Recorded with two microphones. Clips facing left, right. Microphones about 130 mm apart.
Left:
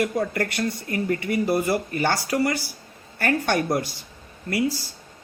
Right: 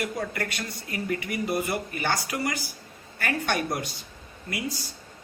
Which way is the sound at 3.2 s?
55° left (ahead or behind).